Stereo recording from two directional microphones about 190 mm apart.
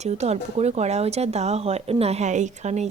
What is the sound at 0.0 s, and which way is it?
Speech, 35° right (ahead or behind).